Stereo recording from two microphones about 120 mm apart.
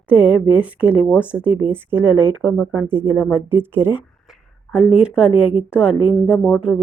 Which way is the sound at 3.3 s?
20° right (ahead or behind).